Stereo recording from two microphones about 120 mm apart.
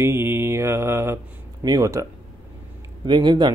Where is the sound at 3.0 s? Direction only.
40° right (ahead or behind).